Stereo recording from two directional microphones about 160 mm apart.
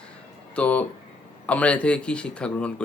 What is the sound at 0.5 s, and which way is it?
A man's voice, 10° left (ahead or behind).